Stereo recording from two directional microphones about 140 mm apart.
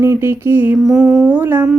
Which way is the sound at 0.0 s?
20° right (ahead or behind).